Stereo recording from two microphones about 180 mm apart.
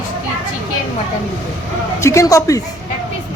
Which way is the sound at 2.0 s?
15° left (ahead or behind).